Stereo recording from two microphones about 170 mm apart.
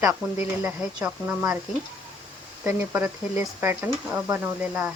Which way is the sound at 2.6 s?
10° right (ahead or behind).